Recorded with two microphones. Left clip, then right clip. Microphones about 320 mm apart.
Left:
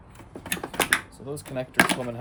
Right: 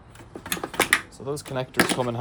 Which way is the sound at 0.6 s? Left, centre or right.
Centre.